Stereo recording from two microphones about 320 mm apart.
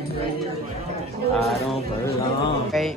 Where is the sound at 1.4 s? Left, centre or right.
Centre.